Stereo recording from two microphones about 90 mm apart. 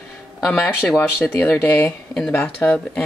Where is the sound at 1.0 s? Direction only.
25° left (ahead or behind).